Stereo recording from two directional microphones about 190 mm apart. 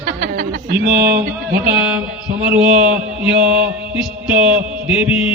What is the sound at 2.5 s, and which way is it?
Mantra, 5° right (ahead or behind).